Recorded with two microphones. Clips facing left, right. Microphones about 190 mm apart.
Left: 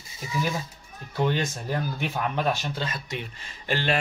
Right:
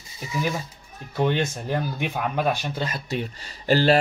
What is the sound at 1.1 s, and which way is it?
Speech, 15° right (ahead or behind).